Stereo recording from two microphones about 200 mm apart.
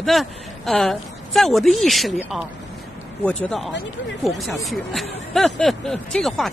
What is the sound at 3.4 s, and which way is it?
Speech, centre (ahead or behind).